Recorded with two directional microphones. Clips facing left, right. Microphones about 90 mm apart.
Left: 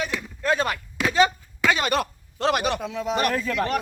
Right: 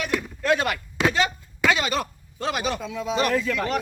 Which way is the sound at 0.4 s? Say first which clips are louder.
Even; 30° left (ahead or behind).